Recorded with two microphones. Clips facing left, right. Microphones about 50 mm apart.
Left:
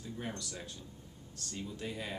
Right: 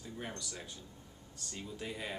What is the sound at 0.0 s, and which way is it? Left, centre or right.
Speech, centre.